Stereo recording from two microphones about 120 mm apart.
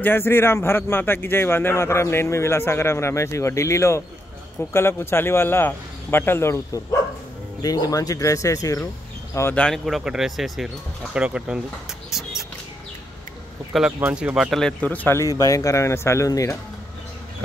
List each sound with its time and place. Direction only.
0.0 s speech: 20° left (ahead or behind)
9.6 s speech: centre (ahead or behind)
12.1 s music: centre (ahead or behind)
13.9 s speech: 15° right (ahead or behind)
14.3 s speech: centre (ahead or behind)
15.1 s speech: 30° left (ahead or behind)